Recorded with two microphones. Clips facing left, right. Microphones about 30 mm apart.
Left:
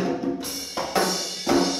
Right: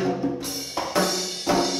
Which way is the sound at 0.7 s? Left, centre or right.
Centre.